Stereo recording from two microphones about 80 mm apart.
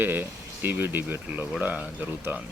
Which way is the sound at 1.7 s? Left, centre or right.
Centre.